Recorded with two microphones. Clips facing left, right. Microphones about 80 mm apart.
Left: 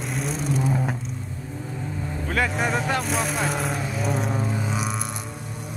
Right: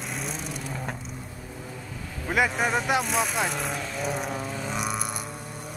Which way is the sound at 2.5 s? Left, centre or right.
Centre.